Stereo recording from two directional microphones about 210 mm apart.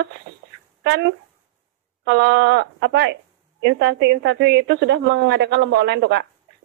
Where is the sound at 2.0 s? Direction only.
55° right (ahead or behind).